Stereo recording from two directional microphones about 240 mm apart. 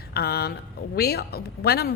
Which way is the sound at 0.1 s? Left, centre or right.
Left.